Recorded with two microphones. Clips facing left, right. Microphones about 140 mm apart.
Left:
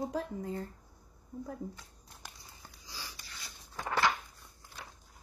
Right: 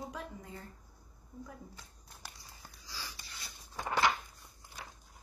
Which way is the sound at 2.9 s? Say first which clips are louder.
Even; 20° left (ahead or behind).